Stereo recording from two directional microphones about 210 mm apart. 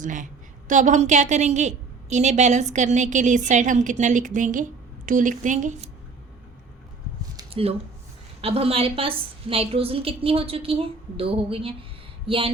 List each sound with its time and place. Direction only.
0.0 s a woman's voice: 40° right (ahead or behind)
7.3 s a sound: 25° right (ahead or behind)
8.4 s a woman's voice: 25° right (ahead or behind)